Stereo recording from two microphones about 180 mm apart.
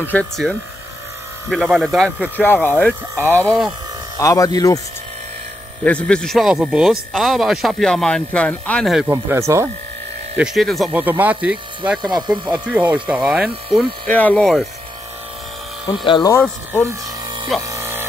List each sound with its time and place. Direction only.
0.0 s a man's voice: 10° left (ahead or behind)
4.2 s speech: 20° left (ahead or behind)
5.9 s a man's voice: 5° left (ahead or behind)
9.0 s speech: 15° right (ahead or behind)
10.3 s speech: 5° right (ahead or behind)
12.0 s speech: 25° right (ahead or behind)
12.5 s speech: 10° right (ahead or behind)
15.9 s speech: 25° left (ahead or behind)
17.6 s electric shaver: 15° right (ahead or behind)